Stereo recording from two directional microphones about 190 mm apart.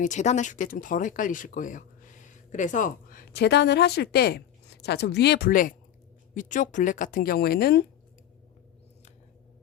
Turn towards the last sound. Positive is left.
turn(degrees=55)  # may be behind; listen again after turning